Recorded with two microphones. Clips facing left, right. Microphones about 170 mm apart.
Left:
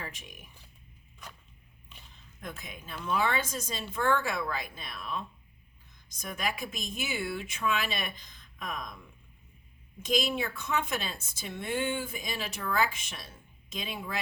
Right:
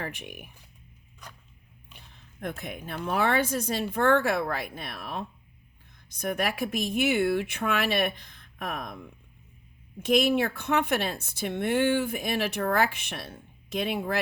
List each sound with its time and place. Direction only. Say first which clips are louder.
0.0 s speech: right 7 dB; 65° right (ahead or behind)
2.4 s speech: right 8 dB; 60° right (ahead or behind)